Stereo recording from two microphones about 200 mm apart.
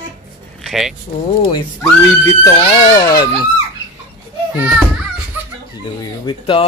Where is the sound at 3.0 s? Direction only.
20° left (ahead or behind).